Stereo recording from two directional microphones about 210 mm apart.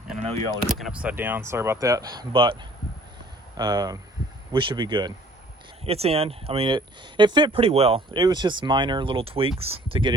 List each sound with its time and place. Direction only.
0.7 s speech: centre (ahead or behind); by 2.6 s 25° right (ahead or behind)
3.6 s speech: 20° right (ahead or behind)